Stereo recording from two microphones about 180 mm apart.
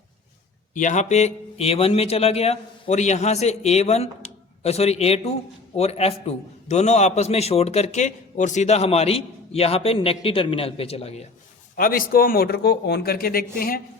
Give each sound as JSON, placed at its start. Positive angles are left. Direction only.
{"t": 0.7, "sound": "a man's voice", "side_deg": 45}
{"t": 11.8, "sound": "a man's voice", "side_deg": 55}